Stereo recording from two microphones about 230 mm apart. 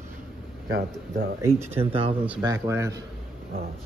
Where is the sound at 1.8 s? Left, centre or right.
Right.